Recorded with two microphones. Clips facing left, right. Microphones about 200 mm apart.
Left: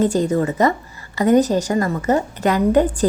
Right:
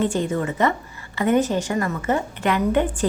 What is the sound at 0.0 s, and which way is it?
Speech, 40° left (ahead or behind).